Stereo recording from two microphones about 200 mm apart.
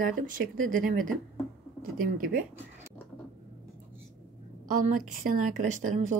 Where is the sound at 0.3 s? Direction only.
45° right (ahead or behind).